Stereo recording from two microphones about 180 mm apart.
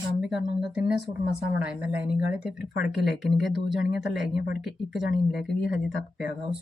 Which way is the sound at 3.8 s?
65° left (ahead or behind).